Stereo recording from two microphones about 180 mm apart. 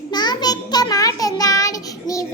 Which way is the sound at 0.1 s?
25° left (ahead or behind).